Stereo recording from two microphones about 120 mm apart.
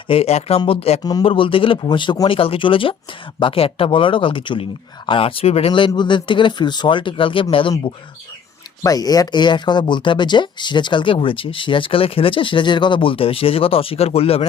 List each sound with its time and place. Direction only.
0.1 s speech: 60° left (ahead or behind)
5.9 s speech: 40° left (ahead or behind)
8.8 s speech: 30° left (ahead or behind); by 14.4 s 55° left (ahead or behind)